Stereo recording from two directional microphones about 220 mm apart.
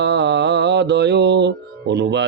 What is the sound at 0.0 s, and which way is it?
Mantra, 50° right (ahead or behind).